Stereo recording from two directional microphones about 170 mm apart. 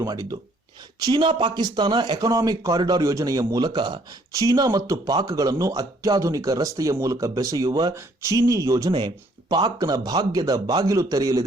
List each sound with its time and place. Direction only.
0.0 s speech: 20° right (ahead or behind)